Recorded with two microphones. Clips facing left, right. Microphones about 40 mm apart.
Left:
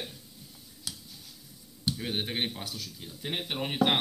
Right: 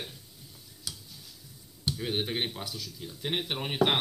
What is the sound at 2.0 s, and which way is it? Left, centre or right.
Speech, centre.